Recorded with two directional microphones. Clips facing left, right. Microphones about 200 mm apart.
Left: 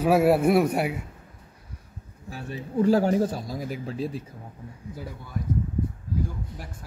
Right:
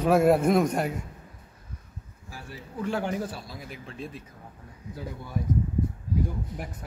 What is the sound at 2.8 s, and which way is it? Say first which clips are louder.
Speech: left 8 dB; 40° left (ahead or behind).